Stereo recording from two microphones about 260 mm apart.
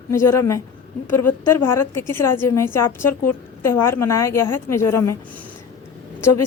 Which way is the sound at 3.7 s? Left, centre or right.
Centre.